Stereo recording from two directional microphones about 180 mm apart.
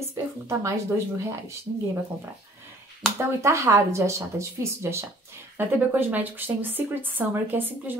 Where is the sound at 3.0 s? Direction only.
5° left (ahead or behind).